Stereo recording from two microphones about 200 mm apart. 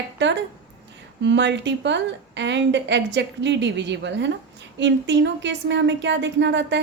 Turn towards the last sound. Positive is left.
turn(degrees=-65)  # may be behind; listen again after turning